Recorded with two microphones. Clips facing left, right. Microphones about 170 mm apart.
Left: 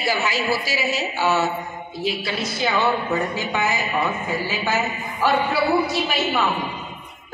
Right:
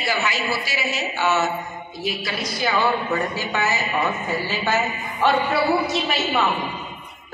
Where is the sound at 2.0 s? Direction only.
25° left (ahead or behind).